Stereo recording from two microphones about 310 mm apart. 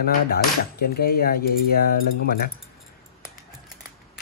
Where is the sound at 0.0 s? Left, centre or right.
Left.